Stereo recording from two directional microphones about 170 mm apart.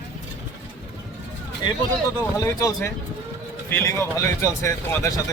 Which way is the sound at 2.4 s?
20° left (ahead or behind).